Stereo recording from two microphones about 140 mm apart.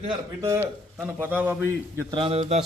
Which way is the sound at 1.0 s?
10° right (ahead or behind).